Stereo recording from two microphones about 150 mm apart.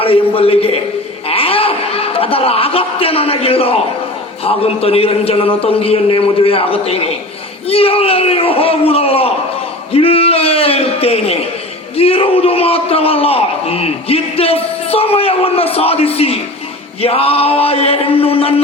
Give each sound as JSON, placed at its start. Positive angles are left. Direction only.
{"t": 0.0, "sound": "a man's voice", "side_deg": 40}